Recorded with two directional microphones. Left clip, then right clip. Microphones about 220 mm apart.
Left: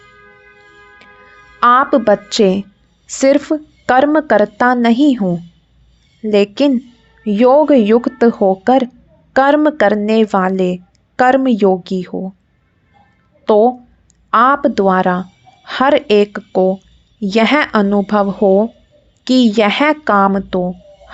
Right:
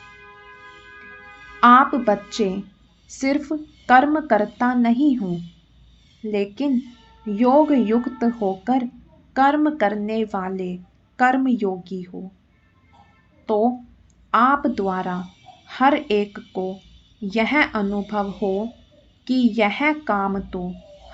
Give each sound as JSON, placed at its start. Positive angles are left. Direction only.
{"t": 1.6, "sound": "speech", "side_deg": 45}
{"t": 13.4, "sound": "speech", "side_deg": 40}